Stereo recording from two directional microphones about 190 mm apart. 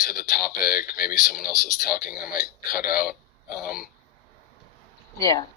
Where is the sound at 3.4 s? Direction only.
50° left (ahead or behind).